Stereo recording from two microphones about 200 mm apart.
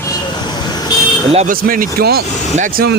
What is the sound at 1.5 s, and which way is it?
Speech, 45° right (ahead or behind).